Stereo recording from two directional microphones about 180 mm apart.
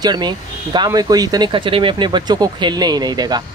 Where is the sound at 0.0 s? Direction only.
25° right (ahead or behind).